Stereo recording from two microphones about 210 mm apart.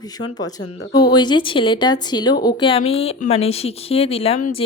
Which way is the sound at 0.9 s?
20° left (ahead or behind).